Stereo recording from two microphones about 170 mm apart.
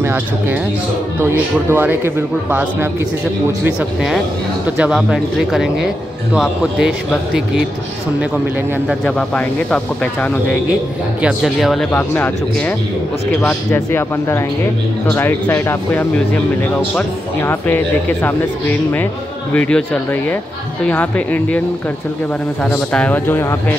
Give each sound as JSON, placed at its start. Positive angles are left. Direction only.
{"t": 0.0, "sound": "a man's voice", "side_deg": -15}
{"t": 1.7, "sound": "a man's voice", "side_deg": -10}
{"t": 3.6, "sound": "speech", "side_deg": -5}
{"t": 9.0, "sound": "speech", "side_deg": 5}
{"t": 11.2, "sound": "speech", "side_deg": 0}
{"t": 11.9, "sound": "speech", "side_deg": 10}
{"t": 17.4, "sound": "speech", "side_deg": 15}
{"t": 22.7, "sound": "speech", "side_deg": 5}